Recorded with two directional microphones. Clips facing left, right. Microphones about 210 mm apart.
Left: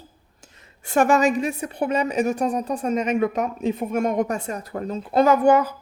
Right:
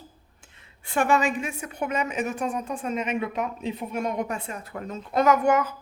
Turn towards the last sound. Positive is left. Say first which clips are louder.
# left 4 dB
turn(degrees=35)  # may be behind; listen again after turning